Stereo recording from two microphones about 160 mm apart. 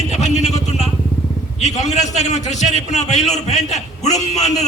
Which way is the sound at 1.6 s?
45° left (ahead or behind).